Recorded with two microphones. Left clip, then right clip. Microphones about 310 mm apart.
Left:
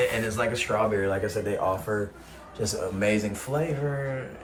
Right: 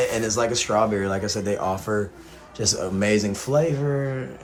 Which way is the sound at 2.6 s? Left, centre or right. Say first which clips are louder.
Right 3 dB; right.